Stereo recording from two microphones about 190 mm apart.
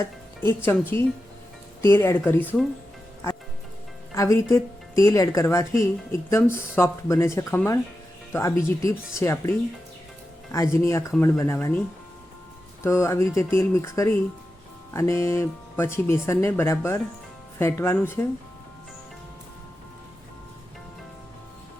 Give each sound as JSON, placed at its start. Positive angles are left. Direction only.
{"t": 0.0, "sound": "speech", "side_deg": 15}
{"t": 4.1, "sound": "speech", "side_deg": 15}
{"t": 12.8, "sound": "speech", "side_deg": 15}